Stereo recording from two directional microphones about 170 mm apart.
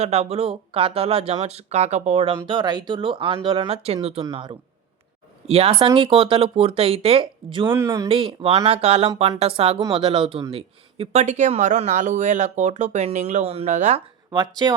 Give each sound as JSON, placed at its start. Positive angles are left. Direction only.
{"t": 0.0, "sound": "speech", "side_deg": -40}
{"t": 2.5, "sound": "speech", "side_deg": -25}
{"t": 4.2, "sound": "speech", "side_deg": -25}
{"t": 5.5, "sound": "speech", "side_deg": -35}
{"t": 7.7, "sound": "speech", "side_deg": -15}
{"t": 8.0, "sound": "speech", "side_deg": -30}
{"t": 14.3, "sound": "speech", "side_deg": -20}